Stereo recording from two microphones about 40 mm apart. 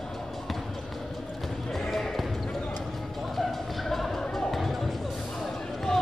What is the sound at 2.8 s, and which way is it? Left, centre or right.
Music, centre.